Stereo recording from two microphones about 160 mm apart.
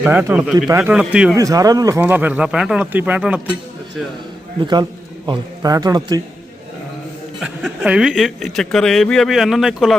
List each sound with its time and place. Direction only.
0.0 s speech: 10° right (ahead or behind)
1.4 s a man's voice: 20° right (ahead or behind)
2.0 s speech: 10° right (ahead or behind)
4.6 s a man's voice: 25° right (ahead or behind)
7.3 s speech: centre (ahead or behind)